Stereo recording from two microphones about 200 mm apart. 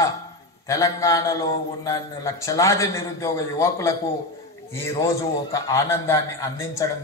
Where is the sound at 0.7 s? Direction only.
15° left (ahead or behind).